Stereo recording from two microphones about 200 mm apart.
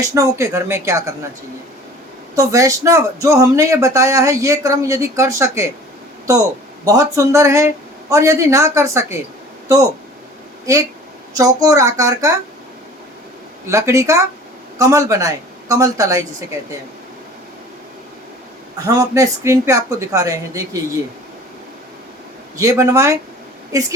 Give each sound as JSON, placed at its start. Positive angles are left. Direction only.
{"t": 0.0, "sound": "speech", "side_deg": -15}
{"t": 2.3, "sound": "speech", "side_deg": -15}
{"t": 6.8, "sound": "speech", "side_deg": -15}
{"t": 11.3, "sound": "speech", "side_deg": -15}
{"t": 13.7, "sound": "speech", "side_deg": -15}
{"t": 18.9, "sound": "speech", "side_deg": -15}
{"t": 22.5, "sound": "speech", "side_deg": -15}